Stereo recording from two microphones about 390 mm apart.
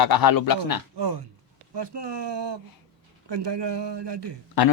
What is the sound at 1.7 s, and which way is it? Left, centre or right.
Speech, right.